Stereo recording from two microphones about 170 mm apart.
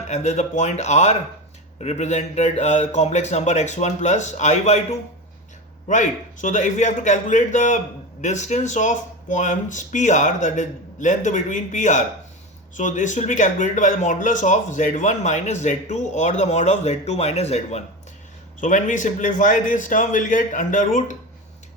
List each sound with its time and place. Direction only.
0.1 s a man's voice: 40° left (ahead or behind)